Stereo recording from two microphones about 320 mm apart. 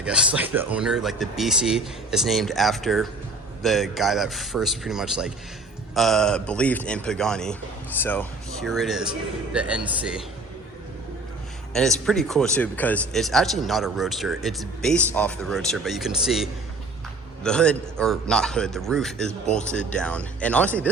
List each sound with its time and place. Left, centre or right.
0.0 s speech: centre
11.7 s speech: centre